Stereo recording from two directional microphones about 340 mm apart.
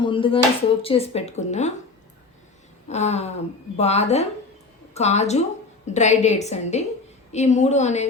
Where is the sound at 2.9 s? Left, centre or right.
Centre.